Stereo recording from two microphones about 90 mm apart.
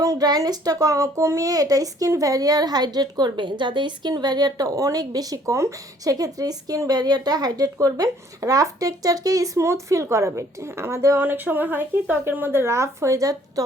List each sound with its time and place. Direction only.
0.0 s a woman's voice: 40° right (ahead or behind)
11.2 s speech: 20° right (ahead or behind); by 13.7 s 40° right (ahead or behind)